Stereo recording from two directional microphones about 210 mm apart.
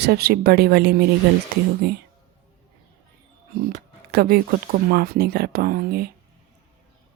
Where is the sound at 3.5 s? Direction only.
45° right (ahead or behind).